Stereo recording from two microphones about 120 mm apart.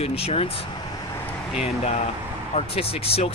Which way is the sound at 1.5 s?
60° left (ahead or behind).